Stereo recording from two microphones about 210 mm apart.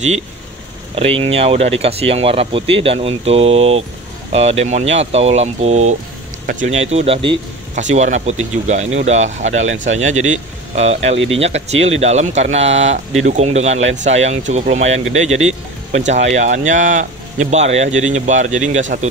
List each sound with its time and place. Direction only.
0.9 s speech: 30° right (ahead or behind)